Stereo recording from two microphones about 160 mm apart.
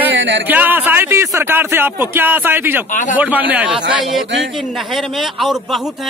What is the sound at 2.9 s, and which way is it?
Speech, 55° left (ahead or behind).